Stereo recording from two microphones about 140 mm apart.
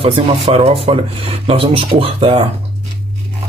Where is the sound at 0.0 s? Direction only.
40° right (ahead or behind).